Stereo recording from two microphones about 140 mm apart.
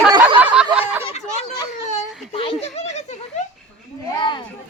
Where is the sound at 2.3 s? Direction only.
45° left (ahead or behind).